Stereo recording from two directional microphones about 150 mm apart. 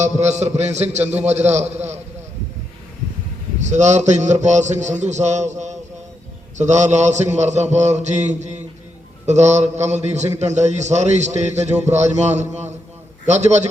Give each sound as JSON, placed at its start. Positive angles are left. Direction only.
{"t": 0.0, "sound": "a man's voice", "side_deg": -50}
{"t": 3.6, "sound": "a man's voice", "side_deg": -50}